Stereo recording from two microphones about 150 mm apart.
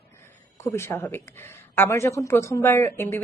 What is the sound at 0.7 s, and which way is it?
A woman's voice, 15° left (ahead or behind).